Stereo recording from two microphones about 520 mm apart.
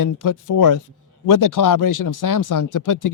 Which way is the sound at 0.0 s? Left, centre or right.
Left.